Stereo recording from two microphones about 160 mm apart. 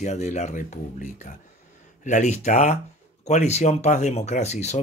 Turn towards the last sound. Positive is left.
turn(degrees=45)  # may be behind; listen again after turning